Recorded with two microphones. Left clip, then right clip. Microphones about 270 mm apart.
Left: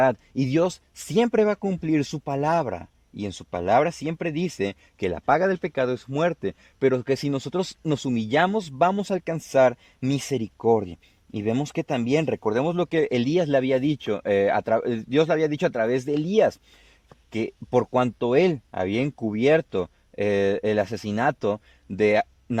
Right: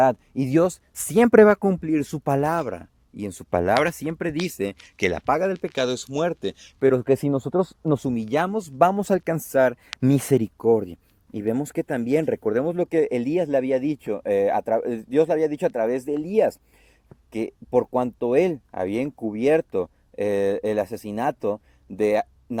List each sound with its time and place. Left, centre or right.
0.0 s speech: centre
0.4 s speech: centre
1.3 s speech: centre
2.5 s speech: left
3.7 s speech: centre
4.4 s speech: left
5.3 s speech: left
6.9 s speech: centre
8.1 s speech: left
9.0 s speech: centre
9.5 s speech: left
10.0 s speech: centre
10.7 s speech: left
11.3 s speech: left